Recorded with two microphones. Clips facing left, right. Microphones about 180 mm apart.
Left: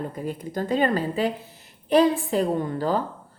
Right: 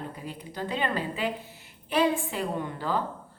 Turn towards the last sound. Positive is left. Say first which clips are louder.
# left 5 dB
turn(degrees=40)  # may be behind; listen again after turning